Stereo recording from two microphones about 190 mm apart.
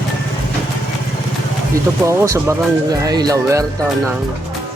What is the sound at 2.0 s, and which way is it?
Speech, 15° right (ahead or behind).